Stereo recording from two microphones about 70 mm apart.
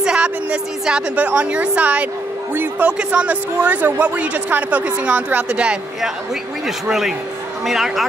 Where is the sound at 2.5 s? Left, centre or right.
Right.